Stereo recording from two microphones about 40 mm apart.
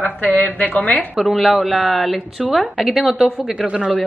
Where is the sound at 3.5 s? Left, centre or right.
Right.